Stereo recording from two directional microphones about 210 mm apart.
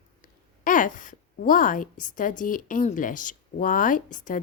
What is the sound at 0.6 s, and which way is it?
Speech, 40° left (ahead or behind).